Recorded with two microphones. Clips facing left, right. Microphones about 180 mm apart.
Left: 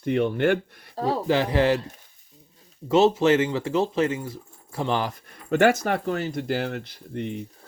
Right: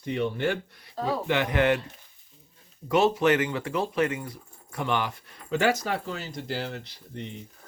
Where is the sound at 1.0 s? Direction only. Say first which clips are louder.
Left 4 dB; 35° left (ahead or behind).